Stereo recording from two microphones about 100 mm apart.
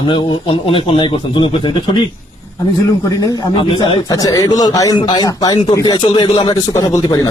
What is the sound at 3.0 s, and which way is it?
Speech, 40° left (ahead or behind).